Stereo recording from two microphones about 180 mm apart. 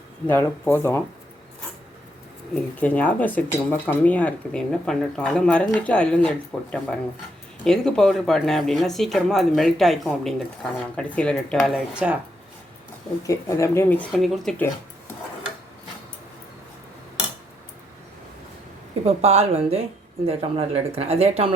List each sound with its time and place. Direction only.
0.3 s speech: 10° left (ahead or behind)
2.8 s speech: 10° left (ahead or behind)
13.2 s speech: 15° left (ahead or behind)
19.0 s speech: 35° right (ahead or behind)